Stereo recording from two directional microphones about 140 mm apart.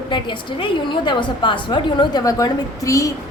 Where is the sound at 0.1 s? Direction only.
35° left (ahead or behind).